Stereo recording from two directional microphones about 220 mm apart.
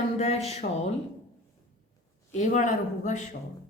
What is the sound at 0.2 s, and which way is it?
Speech, 30° left (ahead or behind).